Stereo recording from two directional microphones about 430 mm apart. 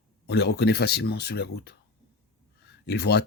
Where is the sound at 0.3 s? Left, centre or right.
Left.